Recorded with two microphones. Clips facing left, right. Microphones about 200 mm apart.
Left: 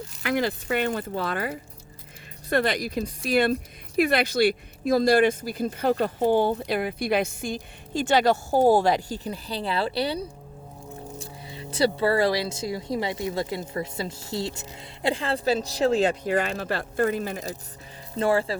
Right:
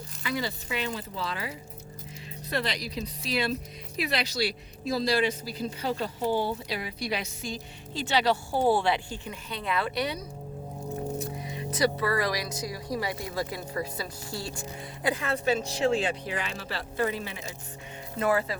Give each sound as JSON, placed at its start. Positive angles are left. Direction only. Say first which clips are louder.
{"t": 0.2, "sound": "speech", "louder": "left 7 dB", "side_deg": 60}
{"t": 18.2, "sound": "speech", "louder": "left 3 dB", "side_deg": 30}